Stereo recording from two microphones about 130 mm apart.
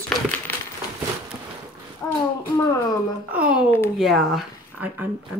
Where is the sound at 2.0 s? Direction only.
20° left (ahead or behind).